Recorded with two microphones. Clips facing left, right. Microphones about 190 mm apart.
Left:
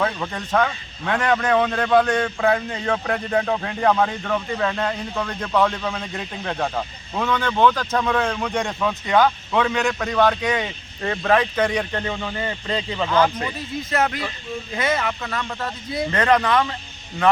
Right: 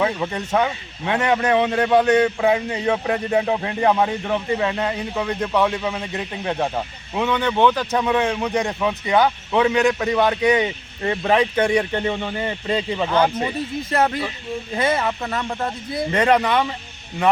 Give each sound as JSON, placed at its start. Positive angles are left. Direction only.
{"t": 0.0, "sound": "speech", "side_deg": -15}
{"t": 2.1, "sound": "speech", "side_deg": -10}
{"t": 13.1, "sound": "speech", "side_deg": -25}
{"t": 16.1, "sound": "speech", "side_deg": -10}